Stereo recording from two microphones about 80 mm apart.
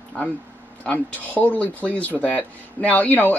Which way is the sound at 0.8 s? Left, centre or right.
Left.